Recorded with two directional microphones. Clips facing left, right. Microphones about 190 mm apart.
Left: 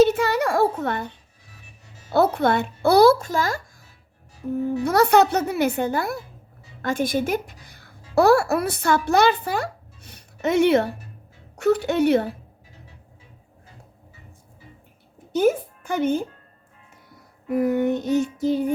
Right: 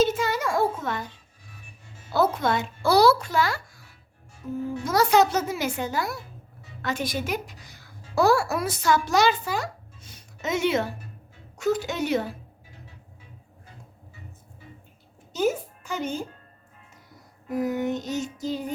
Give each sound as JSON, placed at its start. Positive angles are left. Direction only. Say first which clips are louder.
{"t": 0.0, "sound": "a sound", "louder": "left 6 dB", "side_deg": 60}
{"t": 2.1, "sound": "a woman's voice", "louder": "left 4 dB", "side_deg": 60}
{"t": 4.5, "sound": "a woman's voice", "louder": "left 4 dB", "side_deg": 65}
{"t": 15.3, "sound": "speech", "louder": "left 5 dB", "side_deg": 55}
{"t": 17.5, "sound": "a woman's voice", "louder": "left 5 dB", "side_deg": 55}